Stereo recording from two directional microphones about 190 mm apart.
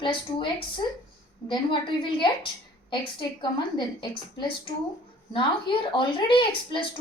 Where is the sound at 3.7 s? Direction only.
25° left (ahead or behind).